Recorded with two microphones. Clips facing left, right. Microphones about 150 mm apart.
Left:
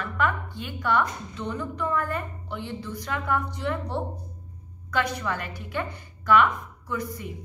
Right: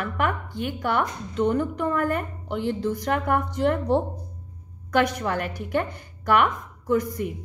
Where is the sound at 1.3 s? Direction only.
55° right (ahead or behind).